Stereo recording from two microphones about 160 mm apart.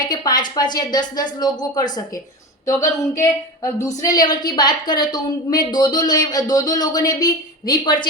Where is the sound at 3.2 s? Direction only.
20° left (ahead or behind).